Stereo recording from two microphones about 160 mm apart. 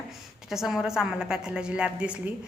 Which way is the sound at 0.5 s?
5° right (ahead or behind).